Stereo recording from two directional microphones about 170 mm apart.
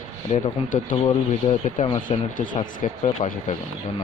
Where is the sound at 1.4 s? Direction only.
30° left (ahead or behind).